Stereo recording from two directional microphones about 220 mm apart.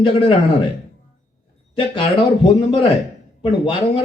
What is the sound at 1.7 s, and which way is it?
A man's voice, 25° left (ahead or behind).